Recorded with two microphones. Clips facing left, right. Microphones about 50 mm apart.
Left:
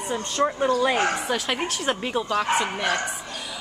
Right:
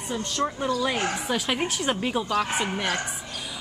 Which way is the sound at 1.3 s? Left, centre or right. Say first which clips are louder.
Even; centre.